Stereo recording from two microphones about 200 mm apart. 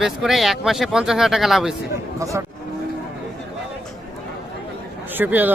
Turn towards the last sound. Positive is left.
turn(degrees=-10)  # may be behind; listen again after turning